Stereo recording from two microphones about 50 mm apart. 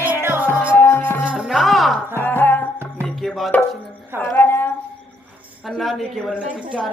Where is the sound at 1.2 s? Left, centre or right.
Right.